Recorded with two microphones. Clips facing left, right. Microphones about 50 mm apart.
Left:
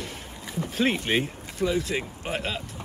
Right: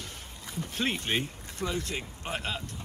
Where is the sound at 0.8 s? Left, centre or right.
Left.